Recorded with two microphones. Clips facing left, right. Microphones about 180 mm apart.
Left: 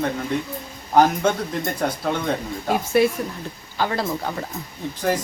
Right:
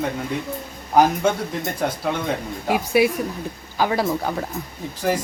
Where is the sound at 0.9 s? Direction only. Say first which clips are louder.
Even; 5° right (ahead or behind).